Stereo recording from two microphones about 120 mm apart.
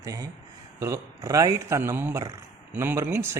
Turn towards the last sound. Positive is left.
turn(degrees=-20)  # may be behind; listen again after turning